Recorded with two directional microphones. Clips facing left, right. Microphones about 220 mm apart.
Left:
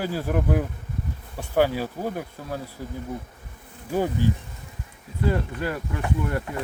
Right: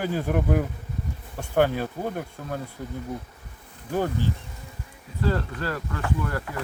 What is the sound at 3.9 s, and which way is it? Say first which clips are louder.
Speech: left 2 dB; 15° left (ahead or behind).